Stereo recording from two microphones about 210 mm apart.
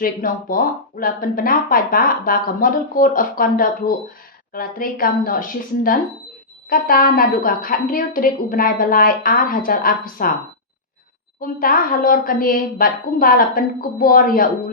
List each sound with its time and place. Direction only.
0.0 s speech: 40° left (ahead or behind)
11.3 s speech: 45° left (ahead or behind)